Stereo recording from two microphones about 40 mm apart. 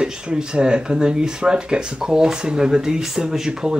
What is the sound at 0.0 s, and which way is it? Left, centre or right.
Speech, right.